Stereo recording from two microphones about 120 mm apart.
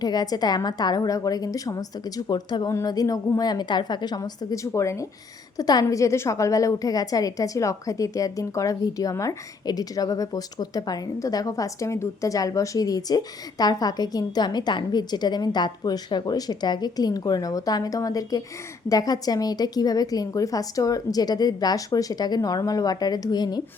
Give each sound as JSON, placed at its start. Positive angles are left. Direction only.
{"t": 0.0, "sound": "a woman's voice", "side_deg": 35}